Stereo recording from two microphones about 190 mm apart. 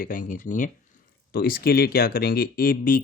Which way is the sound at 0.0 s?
45° left (ahead or behind).